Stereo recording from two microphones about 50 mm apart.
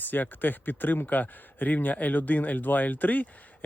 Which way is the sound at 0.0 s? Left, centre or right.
Left.